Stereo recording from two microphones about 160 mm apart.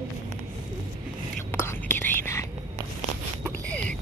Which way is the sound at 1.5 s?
15° left (ahead or behind).